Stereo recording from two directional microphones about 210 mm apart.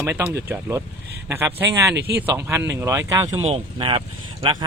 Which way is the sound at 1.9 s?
50° right (ahead or behind).